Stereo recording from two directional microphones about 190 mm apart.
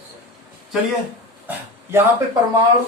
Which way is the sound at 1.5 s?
10° right (ahead or behind).